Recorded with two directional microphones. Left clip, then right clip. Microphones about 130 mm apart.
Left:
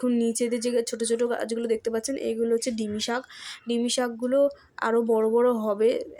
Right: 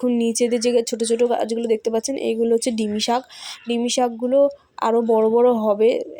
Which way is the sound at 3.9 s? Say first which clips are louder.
Right 8 dB; 20° right (ahead or behind).